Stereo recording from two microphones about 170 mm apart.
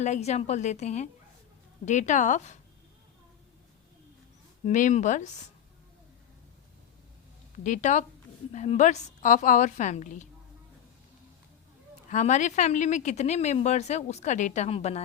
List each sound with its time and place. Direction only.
0.0 s a woman's voice: 40° left (ahead or behind)
4.6 s speech: 45° left (ahead or behind)
7.5 s speech: 45° left (ahead or behind)
12.1 s speech: 45° left (ahead or behind)